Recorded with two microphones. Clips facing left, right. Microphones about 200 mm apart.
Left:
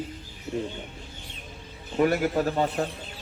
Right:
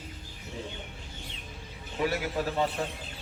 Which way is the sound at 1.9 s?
50° left (ahead or behind).